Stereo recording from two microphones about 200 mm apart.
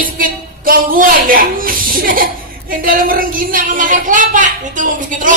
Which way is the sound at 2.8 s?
45° right (ahead or behind).